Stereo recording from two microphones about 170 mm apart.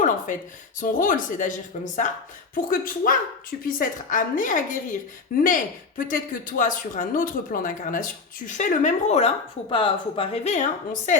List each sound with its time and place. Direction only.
0.3 s speech: 50° left (ahead or behind)